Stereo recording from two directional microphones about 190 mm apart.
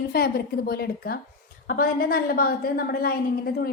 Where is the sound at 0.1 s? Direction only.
55° left (ahead or behind).